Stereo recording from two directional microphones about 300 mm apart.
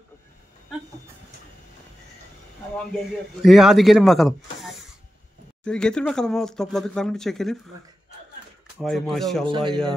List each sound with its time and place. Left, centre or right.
3.4 s speech: centre
8.7 s speech: centre
9.5 s speech: centre